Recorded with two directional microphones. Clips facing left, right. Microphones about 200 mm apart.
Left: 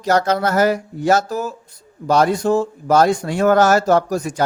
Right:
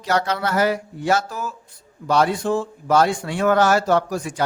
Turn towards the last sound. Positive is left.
turn(degrees=40)  # may be behind; listen again after turning